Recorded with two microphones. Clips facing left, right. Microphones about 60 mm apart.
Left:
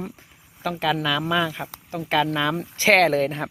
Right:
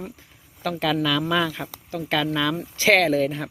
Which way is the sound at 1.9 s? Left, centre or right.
Left.